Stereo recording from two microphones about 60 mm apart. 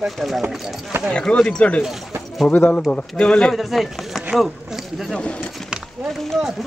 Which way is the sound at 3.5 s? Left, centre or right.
Centre.